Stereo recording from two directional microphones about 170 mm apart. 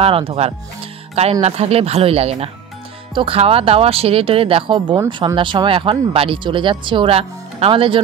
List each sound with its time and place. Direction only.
0.0 s speech: 35° right (ahead or behind)
4.9 s speech: 20° right (ahead or behind)
5.3 s speech: 30° right (ahead or behind)